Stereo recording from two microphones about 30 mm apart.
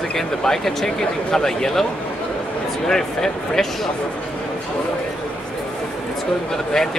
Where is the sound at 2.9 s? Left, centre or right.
Centre.